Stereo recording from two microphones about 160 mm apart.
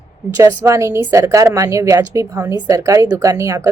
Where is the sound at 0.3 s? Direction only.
20° right (ahead or behind).